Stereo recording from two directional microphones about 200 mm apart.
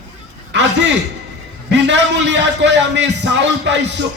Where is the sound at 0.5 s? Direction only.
60° right (ahead or behind).